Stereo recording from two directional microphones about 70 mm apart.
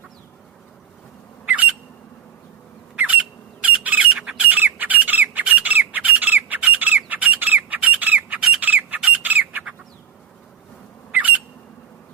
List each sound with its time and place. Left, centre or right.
2.9 s squawk: right
11.1 s squawk: right